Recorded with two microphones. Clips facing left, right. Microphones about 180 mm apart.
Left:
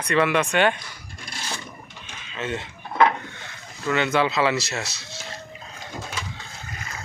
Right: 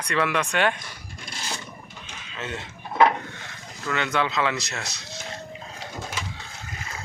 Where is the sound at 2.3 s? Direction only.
Centre (ahead or behind).